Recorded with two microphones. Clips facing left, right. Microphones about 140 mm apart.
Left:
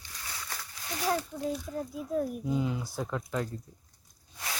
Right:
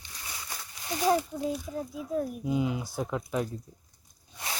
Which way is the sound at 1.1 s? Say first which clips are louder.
Right 4 dB; 15° right (ahead or behind).